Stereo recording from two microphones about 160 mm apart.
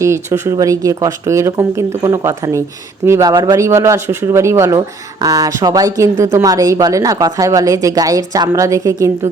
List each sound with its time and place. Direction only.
0.0 s speech: 15° right (ahead or behind)